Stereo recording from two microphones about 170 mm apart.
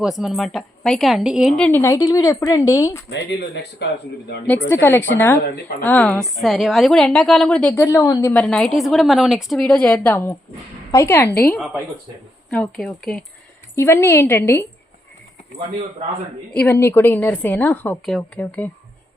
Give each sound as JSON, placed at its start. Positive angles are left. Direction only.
{"t": 0.0, "sound": "a woman's voice", "side_deg": 0}
{"t": 3.1, "sound": "speech", "side_deg": 85}
{"t": 4.7, "sound": "a woman's voice", "side_deg": 10}
{"t": 13.7, "sound": "a woman's voice", "side_deg": 15}
{"t": 16.6, "sound": "a woman's voice", "side_deg": 15}